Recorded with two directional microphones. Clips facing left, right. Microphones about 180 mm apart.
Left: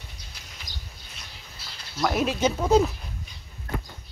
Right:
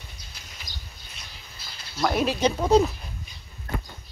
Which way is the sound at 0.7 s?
50° left (ahead or behind).